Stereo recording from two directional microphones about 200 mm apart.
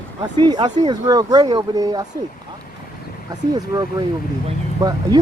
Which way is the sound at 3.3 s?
20° right (ahead or behind).